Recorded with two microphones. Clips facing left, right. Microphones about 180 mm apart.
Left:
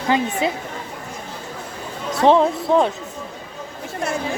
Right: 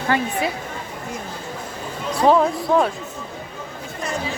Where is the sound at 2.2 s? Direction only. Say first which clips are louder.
Left 1 dB; 25° left (ahead or behind).